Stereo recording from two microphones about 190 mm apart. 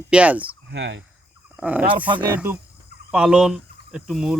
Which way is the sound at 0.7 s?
70° right (ahead or behind).